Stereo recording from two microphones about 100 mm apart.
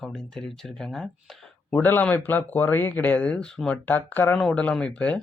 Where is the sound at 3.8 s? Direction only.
15° left (ahead or behind).